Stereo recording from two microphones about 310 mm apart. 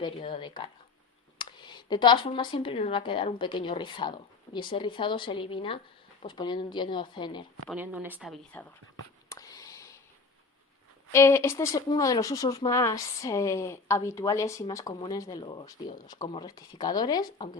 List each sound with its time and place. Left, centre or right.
0.0 s speech: centre
7.7 s speech: centre
9.3 s a sound: centre
11.1 s speech: centre